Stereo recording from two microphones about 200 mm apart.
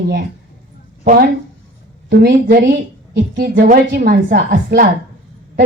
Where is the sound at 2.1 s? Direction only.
50° right (ahead or behind).